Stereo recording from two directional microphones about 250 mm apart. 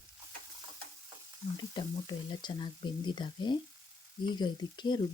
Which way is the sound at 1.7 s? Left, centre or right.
Centre.